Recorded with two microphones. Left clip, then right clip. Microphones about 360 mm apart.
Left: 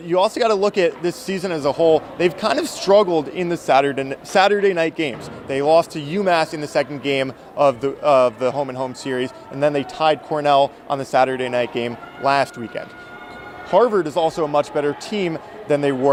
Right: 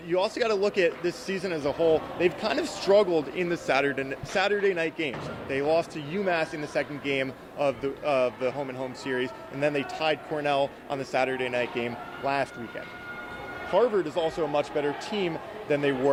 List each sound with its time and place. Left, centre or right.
0.1 s speech: left